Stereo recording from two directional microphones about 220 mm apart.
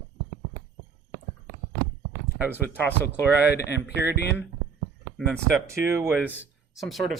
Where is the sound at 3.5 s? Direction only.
50° left (ahead or behind).